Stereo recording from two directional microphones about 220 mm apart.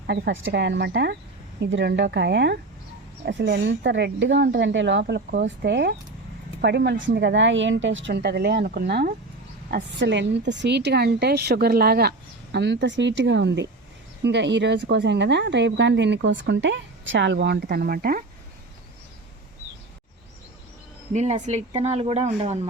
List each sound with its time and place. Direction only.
0.1 s a woman's voice: 55° right (ahead or behind)
21.1 s speech: 30° right (ahead or behind)